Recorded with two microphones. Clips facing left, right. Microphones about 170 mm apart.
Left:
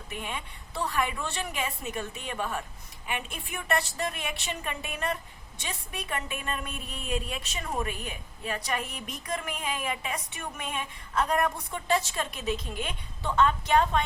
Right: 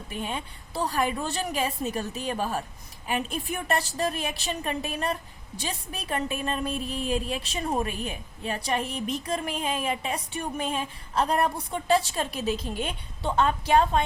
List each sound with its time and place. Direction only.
0.1 s a woman's voice: 30° right (ahead or behind)